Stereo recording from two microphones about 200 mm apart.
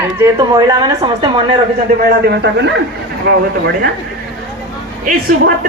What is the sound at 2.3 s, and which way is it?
Speech, 60° right (ahead or behind).